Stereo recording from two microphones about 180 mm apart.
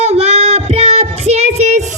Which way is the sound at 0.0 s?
35° right (ahead or behind).